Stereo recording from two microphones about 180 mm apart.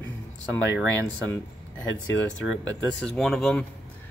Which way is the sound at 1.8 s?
90° left.